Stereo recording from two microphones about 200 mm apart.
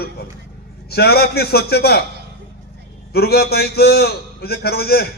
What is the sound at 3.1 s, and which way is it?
A man's voice, 50° left (ahead or behind).